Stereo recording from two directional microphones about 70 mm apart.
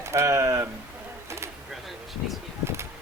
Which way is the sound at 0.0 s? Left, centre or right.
Right.